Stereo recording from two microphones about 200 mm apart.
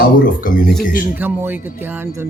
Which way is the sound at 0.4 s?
45° left (ahead or behind).